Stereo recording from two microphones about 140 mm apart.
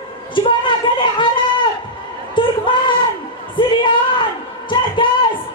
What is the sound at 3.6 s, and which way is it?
Music, 35° left (ahead or behind).